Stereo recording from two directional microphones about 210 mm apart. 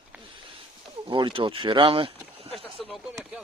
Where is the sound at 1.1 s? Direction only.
25° right (ahead or behind).